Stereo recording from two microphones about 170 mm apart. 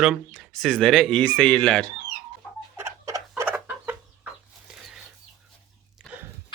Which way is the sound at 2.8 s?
20° right (ahead or behind).